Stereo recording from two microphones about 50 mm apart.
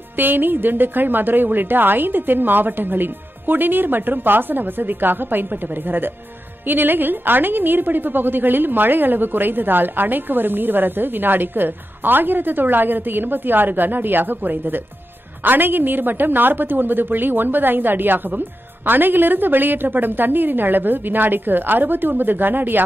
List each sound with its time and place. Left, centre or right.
0.1 s a woman's voice: right